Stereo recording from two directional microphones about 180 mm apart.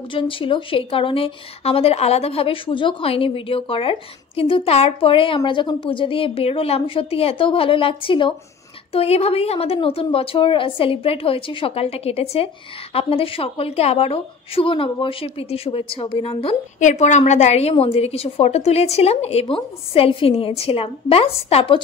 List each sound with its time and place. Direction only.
0.1 s a woman's voice: 30° left (ahead or behind)